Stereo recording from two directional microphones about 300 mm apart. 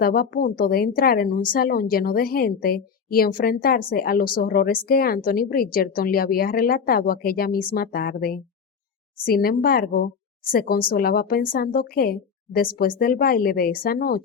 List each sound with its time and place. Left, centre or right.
0.0 s a woman's voice: left